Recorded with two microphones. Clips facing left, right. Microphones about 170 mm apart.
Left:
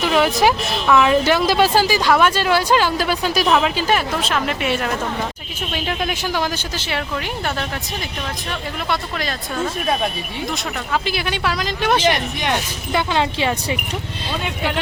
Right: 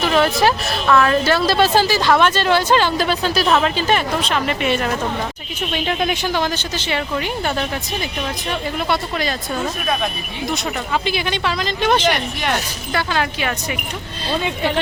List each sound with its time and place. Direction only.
0.0 s speech: 10° left (ahead or behind)
8.9 s speech: centre (ahead or behind)
10.5 s speech: centre (ahead or behind)
12.9 s speech: 20° left (ahead or behind)